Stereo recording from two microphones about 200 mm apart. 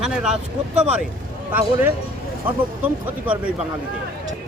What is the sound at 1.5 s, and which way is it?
Speech, 10° right (ahead or behind).